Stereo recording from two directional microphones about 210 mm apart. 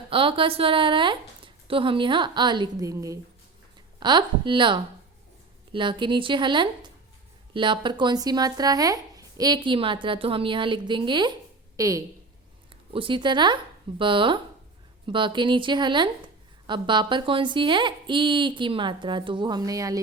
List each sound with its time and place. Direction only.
0.1 s a woman's voice: 25° right (ahead or behind)